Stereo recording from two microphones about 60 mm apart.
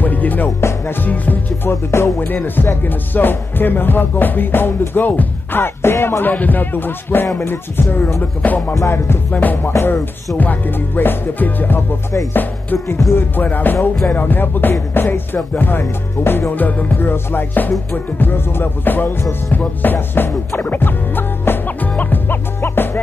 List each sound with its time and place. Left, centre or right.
0.0 s music: left
0.6 s music: left
0.9 s music: left
1.7 s music: left
2.1 s music: left
6.2 s music: left
8.2 s music: left
9.7 s music: left
10.3 s music: left
12.7 s music: left
13.1 s music: left